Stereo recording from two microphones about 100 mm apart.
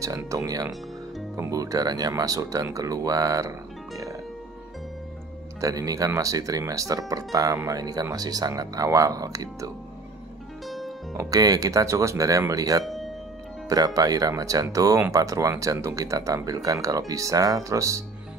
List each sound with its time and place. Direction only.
0.0 s speech: 35° right (ahead or behind)
5.6 s speech: 35° right (ahead or behind)
11.1 s speech: 35° right (ahead or behind)
12.8 s music: centre (ahead or behind)
13.7 s speech: 40° right (ahead or behind)